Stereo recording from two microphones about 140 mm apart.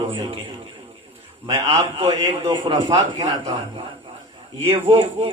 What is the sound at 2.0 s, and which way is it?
A man's voice, 40° right (ahead or behind).